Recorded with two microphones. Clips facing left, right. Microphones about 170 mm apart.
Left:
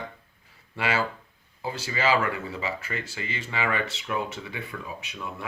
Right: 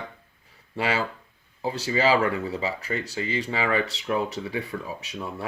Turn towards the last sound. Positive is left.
turn(degrees=-35)  # may be behind; listen again after turning